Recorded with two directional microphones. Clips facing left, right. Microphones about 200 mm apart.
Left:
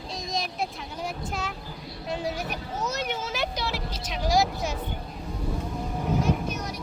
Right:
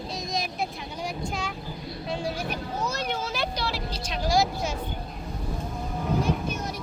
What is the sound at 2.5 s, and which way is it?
Children playing, 20° left (ahead or behind).